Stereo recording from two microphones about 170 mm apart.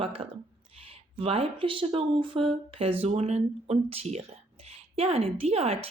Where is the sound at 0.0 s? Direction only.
30° right (ahead or behind).